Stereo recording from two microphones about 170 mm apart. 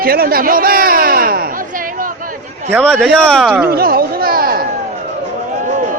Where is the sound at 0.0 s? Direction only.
60° right (ahead or behind).